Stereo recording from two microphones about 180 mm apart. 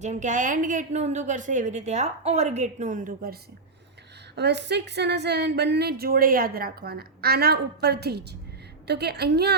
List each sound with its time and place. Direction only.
0.0 s a woman's voice: 40° right (ahead or behind)
4.4 s a woman's voice: 70° right (ahead or behind)